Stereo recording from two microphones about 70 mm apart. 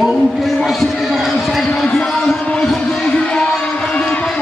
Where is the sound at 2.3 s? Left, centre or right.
Centre.